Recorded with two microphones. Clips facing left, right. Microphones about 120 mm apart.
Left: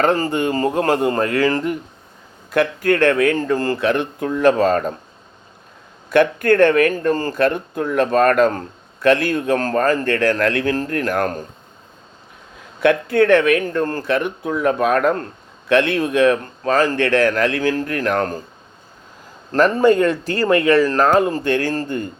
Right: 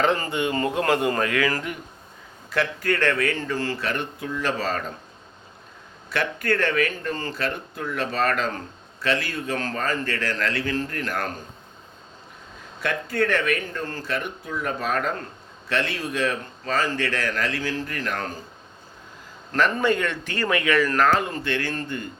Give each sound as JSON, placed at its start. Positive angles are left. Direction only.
{"t": 0.0, "sound": "speech", "side_deg": 45}
{"t": 2.5, "sound": "speech", "side_deg": 50}
{"t": 6.1, "sound": "speech", "side_deg": 50}
{"t": 12.8, "sound": "speech", "side_deg": 60}
{"t": 19.5, "sound": "speech", "side_deg": 40}